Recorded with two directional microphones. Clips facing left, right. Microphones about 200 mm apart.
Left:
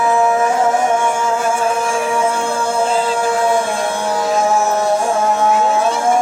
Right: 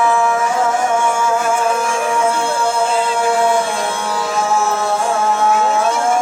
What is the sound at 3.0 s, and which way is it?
Music, 35° left (ahead or behind).